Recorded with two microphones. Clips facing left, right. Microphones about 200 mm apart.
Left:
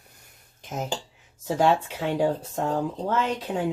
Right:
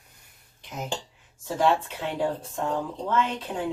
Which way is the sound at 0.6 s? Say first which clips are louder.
Left 6 dB; 45° left (ahead or behind).